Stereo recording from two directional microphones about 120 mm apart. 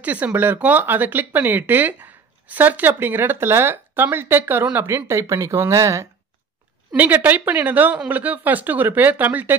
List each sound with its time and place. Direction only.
0.0 s speech: 15° right (ahead or behind)
7.0 s speech: 15° right (ahead or behind)